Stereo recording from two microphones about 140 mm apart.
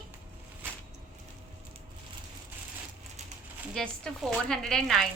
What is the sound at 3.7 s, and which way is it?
A woman's voice, 5° left (ahead or behind).